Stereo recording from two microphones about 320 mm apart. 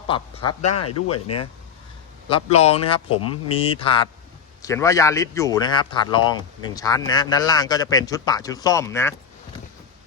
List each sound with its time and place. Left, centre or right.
0.1 s a man's voice: centre
0.8 s speech: left
2.3 s a man's voice: centre